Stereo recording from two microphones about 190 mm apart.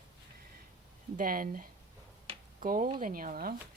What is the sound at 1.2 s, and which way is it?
Speech, 45° right (ahead or behind).